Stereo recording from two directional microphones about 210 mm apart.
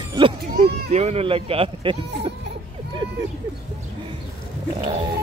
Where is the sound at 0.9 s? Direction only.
30° right (ahead or behind).